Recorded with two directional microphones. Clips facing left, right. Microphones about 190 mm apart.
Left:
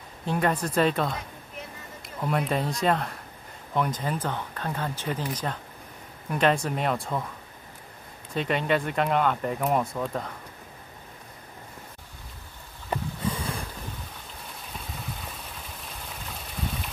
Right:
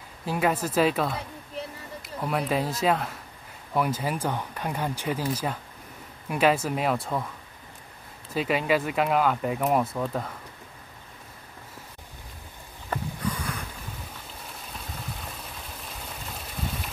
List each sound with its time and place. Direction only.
0.2 s speech: 5° right (ahead or behind)
2.2 s speech: 5° right (ahead or behind)
8.4 s speech: 5° right (ahead or behind)
12.9 s a sound: 25° left (ahead or behind)